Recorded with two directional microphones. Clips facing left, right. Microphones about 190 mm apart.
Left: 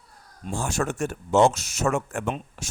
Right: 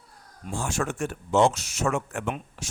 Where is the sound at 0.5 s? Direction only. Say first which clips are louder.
Left 2 dB; 40° left (ahead or behind).